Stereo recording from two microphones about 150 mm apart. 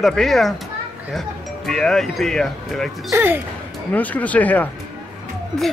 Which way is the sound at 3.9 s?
10° left (ahead or behind).